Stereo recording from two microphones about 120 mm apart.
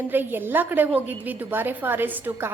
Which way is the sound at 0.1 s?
15° right (ahead or behind).